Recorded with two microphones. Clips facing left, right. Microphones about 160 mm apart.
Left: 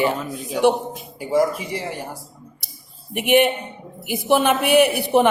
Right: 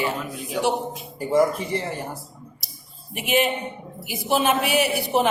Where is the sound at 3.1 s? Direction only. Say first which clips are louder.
Left 5 dB; 60° left (ahead or behind).